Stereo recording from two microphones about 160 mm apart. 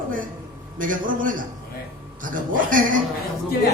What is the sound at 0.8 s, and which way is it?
Music, 55° right (ahead or behind).